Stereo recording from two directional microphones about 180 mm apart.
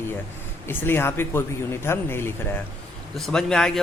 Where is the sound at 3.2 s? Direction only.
5° left (ahead or behind).